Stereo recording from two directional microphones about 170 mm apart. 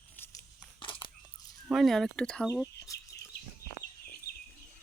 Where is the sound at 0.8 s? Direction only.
30° left (ahead or behind).